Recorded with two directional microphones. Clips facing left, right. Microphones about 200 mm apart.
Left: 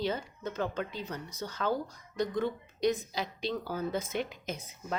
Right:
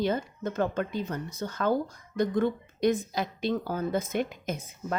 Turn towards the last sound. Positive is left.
turn(degrees=-50)  # may be behind; listen again after turning